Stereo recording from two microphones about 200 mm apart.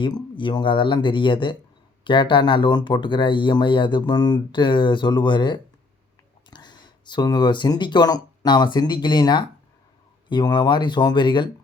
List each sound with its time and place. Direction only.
0.0 s speech: 25° left (ahead or behind)